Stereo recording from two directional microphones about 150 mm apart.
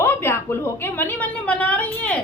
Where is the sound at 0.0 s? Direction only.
15° left (ahead or behind).